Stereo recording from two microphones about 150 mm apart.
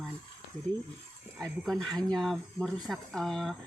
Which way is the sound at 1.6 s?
Centre (ahead or behind).